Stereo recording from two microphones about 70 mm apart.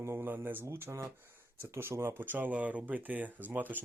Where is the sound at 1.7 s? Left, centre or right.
Right.